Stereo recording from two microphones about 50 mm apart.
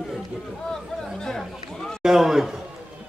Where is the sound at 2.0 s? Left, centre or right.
Centre.